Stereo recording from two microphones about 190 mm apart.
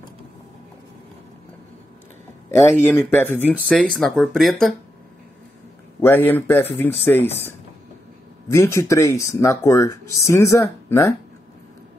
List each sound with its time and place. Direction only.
2.8 s speech: 10° left (ahead or behind)
5.9 s speech: 10° left (ahead or behind)
8.5 s speech: 15° left (ahead or behind)